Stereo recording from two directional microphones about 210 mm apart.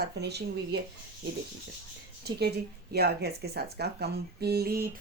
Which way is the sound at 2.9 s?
50° right (ahead or behind).